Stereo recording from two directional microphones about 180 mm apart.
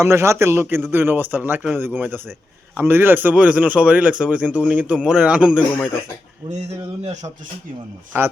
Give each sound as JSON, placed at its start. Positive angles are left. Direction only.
{"t": 0.0, "sound": "speech", "side_deg": -15}
{"t": 6.5, "sound": "a man's voice", "side_deg": -40}